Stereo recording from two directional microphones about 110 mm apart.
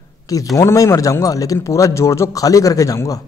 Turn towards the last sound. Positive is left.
turn(degrees=30)  # may be behind; listen again after turning